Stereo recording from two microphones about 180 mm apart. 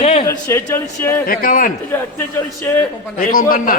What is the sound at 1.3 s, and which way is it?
Speech, 50° left (ahead or behind).